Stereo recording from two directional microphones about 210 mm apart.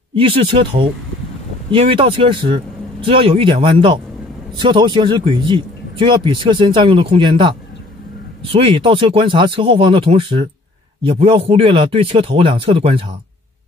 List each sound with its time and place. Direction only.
0.1 s a man's voice: 25° right (ahead or behind)